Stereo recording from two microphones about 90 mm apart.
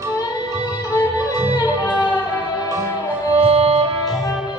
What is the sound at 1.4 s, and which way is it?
Music, 45° left (ahead or behind).